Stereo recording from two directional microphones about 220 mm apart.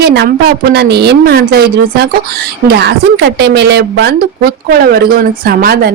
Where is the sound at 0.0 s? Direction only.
50° right (ahead or behind).